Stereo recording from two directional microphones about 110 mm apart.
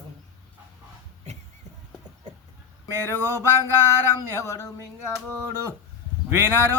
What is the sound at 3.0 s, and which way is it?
Speech, 20° left (ahead or behind).